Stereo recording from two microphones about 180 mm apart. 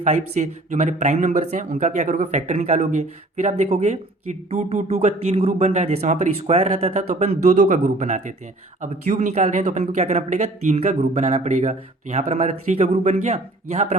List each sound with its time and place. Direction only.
0.0 s speech: 40° right (ahead or behind)